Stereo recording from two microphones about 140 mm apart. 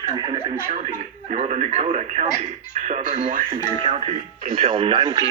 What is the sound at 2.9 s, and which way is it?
Speech, 65° right (ahead or behind).